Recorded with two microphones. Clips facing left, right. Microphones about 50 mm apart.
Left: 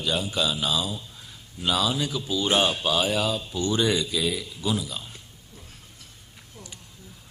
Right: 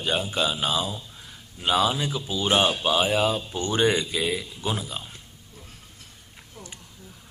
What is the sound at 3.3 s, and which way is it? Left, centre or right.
Speech, right.